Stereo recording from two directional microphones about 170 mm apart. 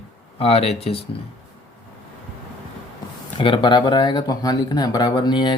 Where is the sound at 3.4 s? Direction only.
30° left (ahead or behind).